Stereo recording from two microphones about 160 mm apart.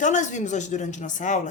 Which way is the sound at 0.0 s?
50° left (ahead or behind).